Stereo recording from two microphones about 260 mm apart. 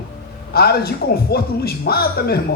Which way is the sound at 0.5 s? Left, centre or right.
Left.